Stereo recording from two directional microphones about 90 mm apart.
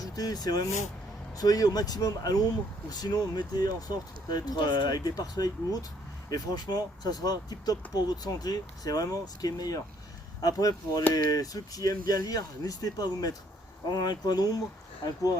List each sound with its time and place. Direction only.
0.0 s speech: 45° left (ahead or behind)